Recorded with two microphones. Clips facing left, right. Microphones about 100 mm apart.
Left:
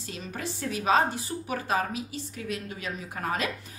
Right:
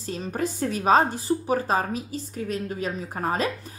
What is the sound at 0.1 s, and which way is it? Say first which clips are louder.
A woman's voice: right 8 dB; 40° right (ahead or behind).